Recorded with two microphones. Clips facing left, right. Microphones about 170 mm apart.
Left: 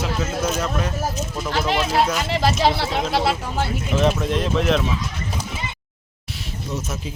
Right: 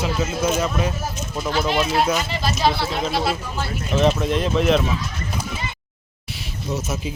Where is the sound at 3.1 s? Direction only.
75° left (ahead or behind).